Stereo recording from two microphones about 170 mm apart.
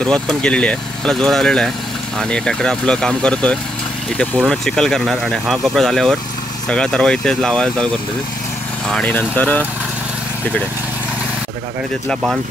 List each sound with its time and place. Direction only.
0.0 s speech: 5° left (ahead or behind)